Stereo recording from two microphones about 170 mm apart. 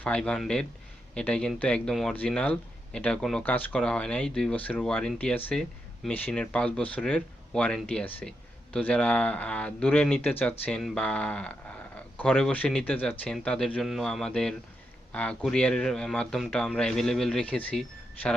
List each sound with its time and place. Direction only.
0.0 s speech: 5° left (ahead or behind)